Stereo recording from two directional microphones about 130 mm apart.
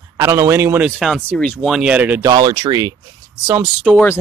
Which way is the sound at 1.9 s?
10° right (ahead or behind).